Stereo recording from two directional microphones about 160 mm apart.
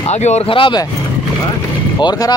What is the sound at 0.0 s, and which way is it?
Speech, 45° left (ahead or behind).